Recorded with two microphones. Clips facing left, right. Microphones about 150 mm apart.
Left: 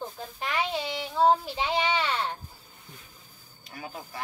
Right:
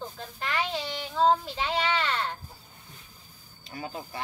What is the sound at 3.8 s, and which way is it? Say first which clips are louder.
Speech: right 2 dB; 25° right (ahead or behind).